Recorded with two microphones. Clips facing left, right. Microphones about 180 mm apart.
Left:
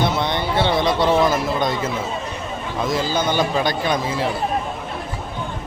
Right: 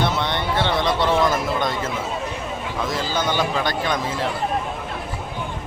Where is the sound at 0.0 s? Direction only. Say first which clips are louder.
Left 2 dB; 10° left (ahead or behind).